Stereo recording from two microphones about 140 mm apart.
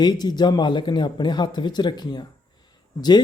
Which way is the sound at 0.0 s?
30° left (ahead or behind).